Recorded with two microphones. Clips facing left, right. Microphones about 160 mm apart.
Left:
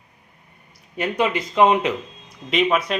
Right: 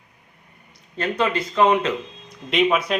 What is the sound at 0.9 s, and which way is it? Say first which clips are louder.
Speech: left 1 dB; 15° left (ahead or behind).